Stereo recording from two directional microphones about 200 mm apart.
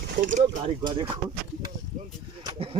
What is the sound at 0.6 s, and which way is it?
Speech, 25° right (ahead or behind).